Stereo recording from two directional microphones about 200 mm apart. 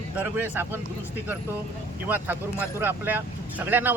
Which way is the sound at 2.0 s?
10° right (ahead or behind).